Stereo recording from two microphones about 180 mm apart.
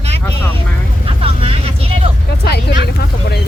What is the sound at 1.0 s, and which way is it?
Vehicle, 30° right (ahead or behind).